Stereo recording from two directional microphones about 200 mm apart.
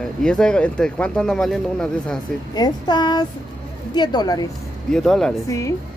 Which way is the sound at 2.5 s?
20° left (ahead or behind).